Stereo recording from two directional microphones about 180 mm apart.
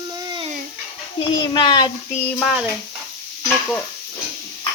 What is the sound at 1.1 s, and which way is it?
Speech, 25° left (ahead or behind).